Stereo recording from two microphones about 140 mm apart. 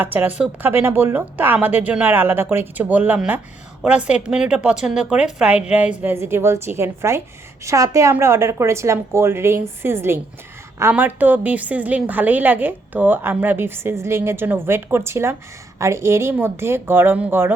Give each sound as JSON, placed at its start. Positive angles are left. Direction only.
{"t": 0.0, "sound": "a woman's voice", "side_deg": -15}